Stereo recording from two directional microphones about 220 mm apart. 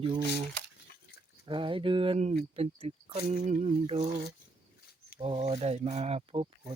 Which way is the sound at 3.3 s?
35° right (ahead or behind).